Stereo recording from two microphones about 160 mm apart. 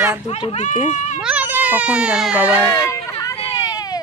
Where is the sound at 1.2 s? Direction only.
10° right (ahead or behind).